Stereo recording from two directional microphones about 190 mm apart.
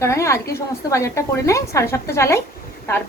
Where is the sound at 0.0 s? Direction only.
15° left (ahead or behind).